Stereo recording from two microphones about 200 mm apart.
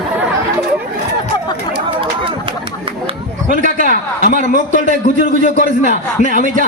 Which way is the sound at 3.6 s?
45° right (ahead or behind).